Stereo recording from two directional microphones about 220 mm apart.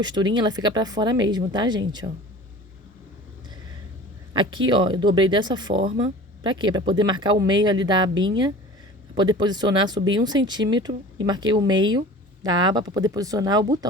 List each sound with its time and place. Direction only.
0.0 s speech: 20° right (ahead or behind)
4.4 s speech: 20° right (ahead or behind)